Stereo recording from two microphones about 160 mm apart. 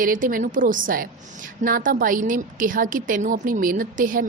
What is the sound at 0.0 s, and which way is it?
A woman's voice, 60° right (ahead or behind).